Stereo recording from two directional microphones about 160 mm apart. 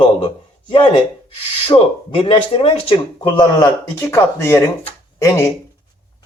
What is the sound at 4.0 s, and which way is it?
A man's voice, 15° left (ahead or behind).